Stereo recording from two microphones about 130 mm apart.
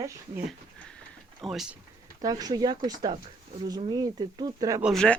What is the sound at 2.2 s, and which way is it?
Speech, 30° right (ahead or behind).